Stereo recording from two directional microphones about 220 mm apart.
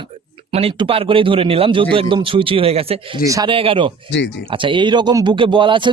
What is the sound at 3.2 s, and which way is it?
A man's voice, 15° right (ahead or behind).